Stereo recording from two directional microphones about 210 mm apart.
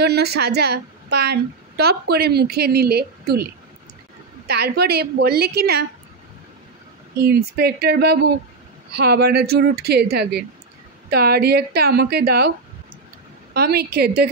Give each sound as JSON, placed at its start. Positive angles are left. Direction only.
{"t": 0.0, "sound": "a woman's voice", "side_deg": -50}
{"t": 4.5, "sound": "a woman's voice", "side_deg": -50}
{"t": 7.2, "sound": "a woman's voice", "side_deg": -50}